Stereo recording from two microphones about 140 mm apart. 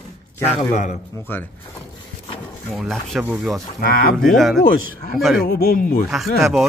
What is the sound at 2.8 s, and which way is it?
Speech, centre (ahead or behind).